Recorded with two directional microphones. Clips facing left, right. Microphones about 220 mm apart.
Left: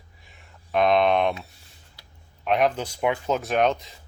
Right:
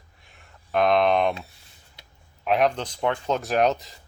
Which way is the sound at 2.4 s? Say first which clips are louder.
Even; centre (ahead or behind).